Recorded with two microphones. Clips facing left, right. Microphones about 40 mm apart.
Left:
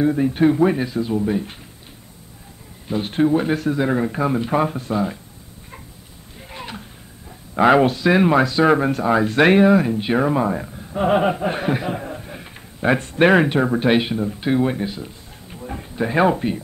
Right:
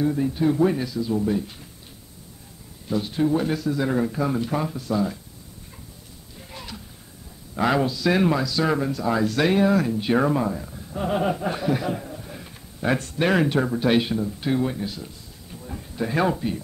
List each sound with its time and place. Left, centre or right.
0.0 s speech: left
3.0 s speech: left
3.3 s speech: left
6.5 s a sound: left
7.5 s speech: left
8.8 s speech: left
9.1 s speech: left
10.8 s a sound: left
11.7 s speech: left
12.2 s a sound: left
13.1 s speech: left
14.7 s a sound: left
15.9 s speech: left